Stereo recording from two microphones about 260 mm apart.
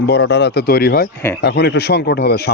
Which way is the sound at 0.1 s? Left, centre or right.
Left.